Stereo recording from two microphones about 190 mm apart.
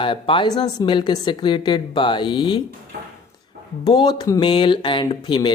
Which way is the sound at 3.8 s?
20° left (ahead or behind).